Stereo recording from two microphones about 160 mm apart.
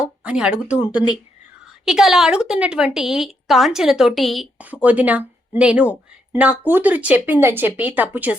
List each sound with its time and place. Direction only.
0.0 s speech: 5° right (ahead or behind)
0.8 s speech: 30° left (ahead or behind)
1.8 s a woman's voice: centre (ahead or behind)